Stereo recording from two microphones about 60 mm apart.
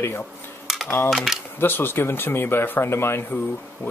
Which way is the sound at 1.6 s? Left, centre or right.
Left.